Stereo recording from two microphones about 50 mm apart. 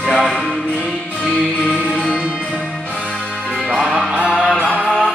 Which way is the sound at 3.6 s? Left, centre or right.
Centre.